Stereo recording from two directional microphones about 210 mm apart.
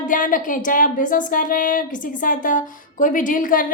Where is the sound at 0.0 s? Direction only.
40° left (ahead or behind).